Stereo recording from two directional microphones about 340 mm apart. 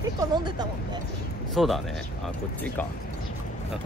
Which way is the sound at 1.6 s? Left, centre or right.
Centre.